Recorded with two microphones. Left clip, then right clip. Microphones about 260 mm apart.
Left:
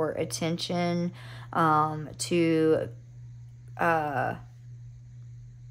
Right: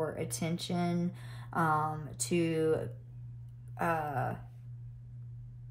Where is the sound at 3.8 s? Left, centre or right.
Left.